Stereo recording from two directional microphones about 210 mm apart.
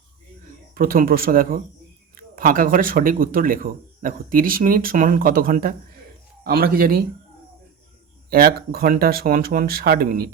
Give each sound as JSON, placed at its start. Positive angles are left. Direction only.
{"t": 0.7, "sound": "speech", "side_deg": -45}
{"t": 8.3, "sound": "speech", "side_deg": -45}